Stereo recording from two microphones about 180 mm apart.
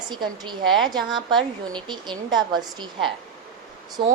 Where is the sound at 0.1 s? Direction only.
25° right (ahead or behind).